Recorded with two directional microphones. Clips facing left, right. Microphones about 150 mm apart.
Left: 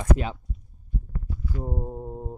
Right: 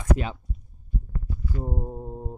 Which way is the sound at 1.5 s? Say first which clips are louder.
Even; centre (ahead or behind).